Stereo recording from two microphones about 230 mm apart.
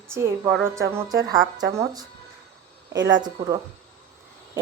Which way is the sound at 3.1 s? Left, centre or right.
Centre.